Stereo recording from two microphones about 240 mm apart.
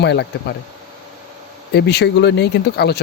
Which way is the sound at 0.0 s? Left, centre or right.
Left.